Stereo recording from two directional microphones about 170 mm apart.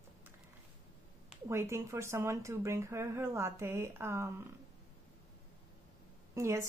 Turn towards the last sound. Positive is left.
turn(degrees=-15)  # may be behind; listen again after turning